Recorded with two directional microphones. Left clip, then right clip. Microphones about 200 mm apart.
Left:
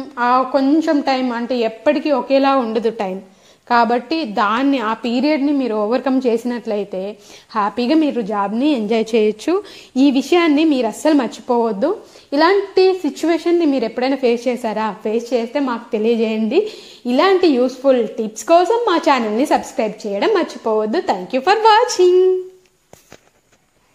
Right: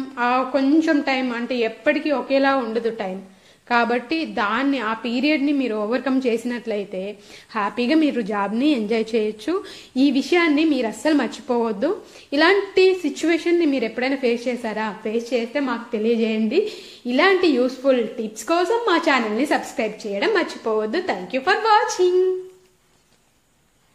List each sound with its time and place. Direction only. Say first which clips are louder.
0.1 s a woman's voice: left 5 dB; 20° left (ahead or behind)
5.2 s a woman's voice: left 3 dB; 20° left (ahead or behind)
8.0 s a woman's voice: left 3 dB; 15° left (ahead or behind)
8.9 s a woman's voice: left 6 dB; 35° left (ahead or behind)